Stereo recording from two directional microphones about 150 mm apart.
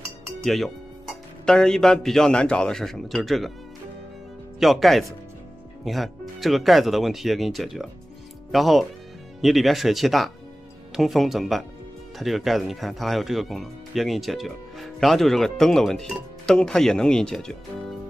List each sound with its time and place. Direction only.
0.4 s speech: centre (ahead or behind)
4.6 s speech: centre (ahead or behind)